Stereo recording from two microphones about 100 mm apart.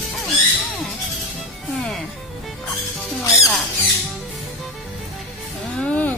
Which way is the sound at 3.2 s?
30° left (ahead or behind).